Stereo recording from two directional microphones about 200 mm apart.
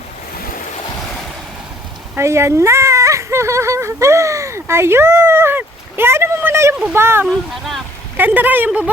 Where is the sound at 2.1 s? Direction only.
15° right (ahead or behind).